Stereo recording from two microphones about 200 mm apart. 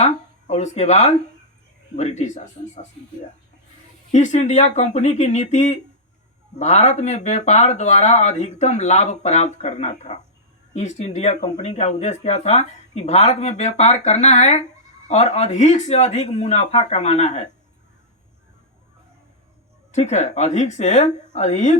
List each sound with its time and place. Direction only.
0.0 s a sound: 35° left (ahead or behind)
2.0 s speech: 35° left (ahead or behind)
4.1 s speech: 35° left (ahead or behind)
19.9 s speech: 35° left (ahead or behind)